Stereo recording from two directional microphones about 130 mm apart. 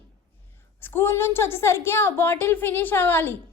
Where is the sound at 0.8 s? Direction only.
20° left (ahead or behind).